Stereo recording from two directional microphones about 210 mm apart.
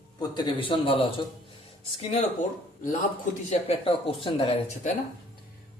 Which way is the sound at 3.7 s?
25° left (ahead or behind).